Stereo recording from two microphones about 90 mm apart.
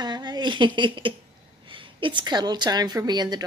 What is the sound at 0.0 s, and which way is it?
A woman's voice, 50° right (ahead or behind).